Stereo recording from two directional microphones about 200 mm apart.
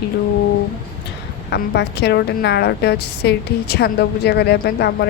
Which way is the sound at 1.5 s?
55° left (ahead or behind).